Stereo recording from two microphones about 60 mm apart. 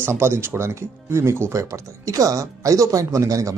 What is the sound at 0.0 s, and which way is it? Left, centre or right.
Speech, right.